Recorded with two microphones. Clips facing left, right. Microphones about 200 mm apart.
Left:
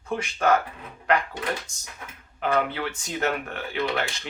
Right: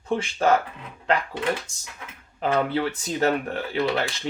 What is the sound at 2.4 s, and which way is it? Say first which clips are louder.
Speech: right 2 dB; 30° right (ahead or behind).